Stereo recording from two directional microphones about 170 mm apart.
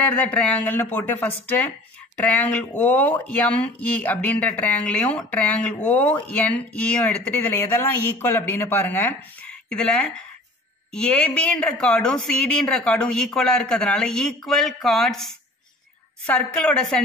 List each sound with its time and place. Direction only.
0.0 s a woman's voice: 10° left (ahead or behind)